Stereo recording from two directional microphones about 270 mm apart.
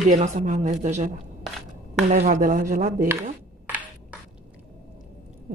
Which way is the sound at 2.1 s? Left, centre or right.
Right.